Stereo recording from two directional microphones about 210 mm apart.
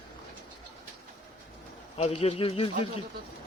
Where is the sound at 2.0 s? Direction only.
30° left (ahead or behind).